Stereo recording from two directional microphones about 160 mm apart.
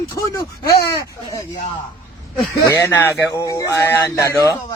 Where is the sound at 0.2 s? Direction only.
20° left (ahead or behind).